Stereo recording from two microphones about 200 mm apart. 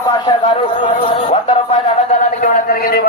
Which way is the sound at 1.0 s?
30° left (ahead or behind).